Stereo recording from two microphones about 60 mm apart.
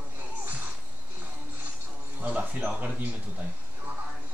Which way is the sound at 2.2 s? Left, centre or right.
Right.